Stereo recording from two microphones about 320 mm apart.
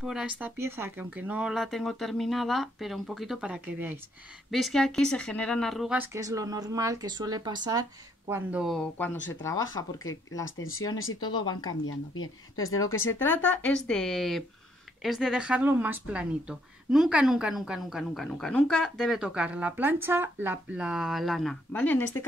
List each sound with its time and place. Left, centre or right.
0.0 s speech: centre
10.4 s speech: left
11.1 s speech: centre
11.4 s speech: left
13.4 s speech: centre